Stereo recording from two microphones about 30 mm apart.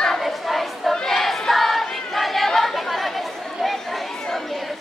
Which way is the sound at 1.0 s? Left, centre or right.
Centre.